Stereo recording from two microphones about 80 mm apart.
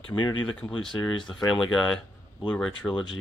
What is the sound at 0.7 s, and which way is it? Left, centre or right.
Speech, centre.